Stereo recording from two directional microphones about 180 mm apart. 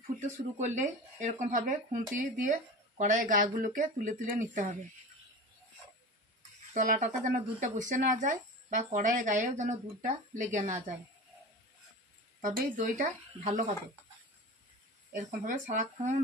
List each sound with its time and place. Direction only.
0.6 s speech: 40° right (ahead or behind)
6.7 s speech: 45° right (ahead or behind)
12.4 s speech: 50° right (ahead or behind)
15.1 s speech: 45° right (ahead or behind)